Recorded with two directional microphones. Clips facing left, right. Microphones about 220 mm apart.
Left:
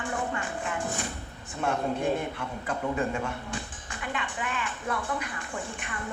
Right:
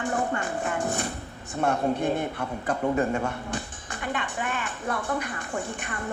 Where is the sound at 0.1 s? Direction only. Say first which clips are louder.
Right 2 dB; 45° right (ahead or behind).